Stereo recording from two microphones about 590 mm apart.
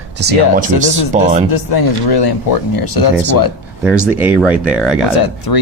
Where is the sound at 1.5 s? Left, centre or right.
Left.